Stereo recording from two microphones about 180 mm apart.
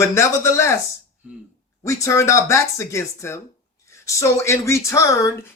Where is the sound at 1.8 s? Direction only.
15° left (ahead or behind).